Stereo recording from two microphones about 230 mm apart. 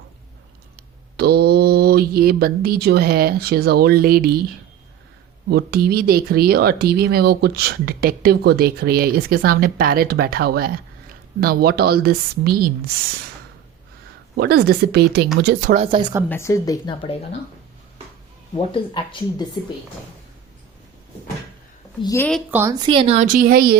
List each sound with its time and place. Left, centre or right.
0.8 s mantra: right
5.5 s speech: right
14.3 s a woman's voice: right
15.7 s speech: right
16.3 s speech: centre
18.5 s speech: centre
22.0 s speech: centre
22.3 s speech: centre
22.6 s speech: centre; by 23.7 s right